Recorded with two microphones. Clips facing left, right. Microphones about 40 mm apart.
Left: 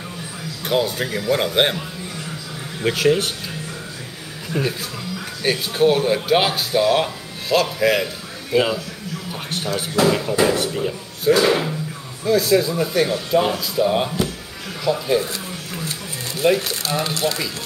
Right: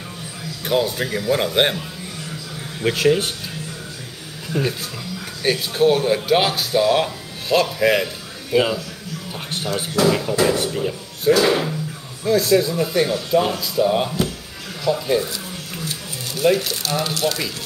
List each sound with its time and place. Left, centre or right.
0.7 s speech: centre
2.8 s speech: centre
4.6 s speech: centre
5.4 s speech: centre
16.6 s speech: left